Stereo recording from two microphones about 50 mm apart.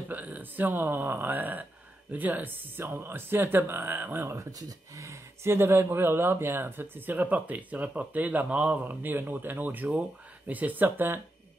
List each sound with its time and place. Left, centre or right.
0.1 s speech: right
4.9 s speech: right
8.8 s speech: right